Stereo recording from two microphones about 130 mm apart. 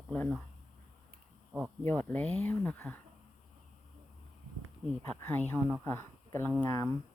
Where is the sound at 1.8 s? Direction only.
10° left (ahead or behind).